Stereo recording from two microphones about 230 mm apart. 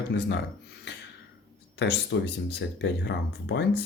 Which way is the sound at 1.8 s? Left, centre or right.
Left.